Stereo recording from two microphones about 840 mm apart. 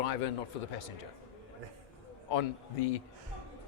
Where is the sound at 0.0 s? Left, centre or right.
Left.